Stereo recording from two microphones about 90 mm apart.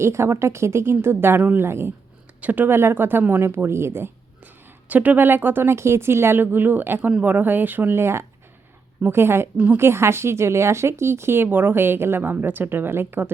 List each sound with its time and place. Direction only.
0.0 s a woman's voice: 30° right (ahead or behind)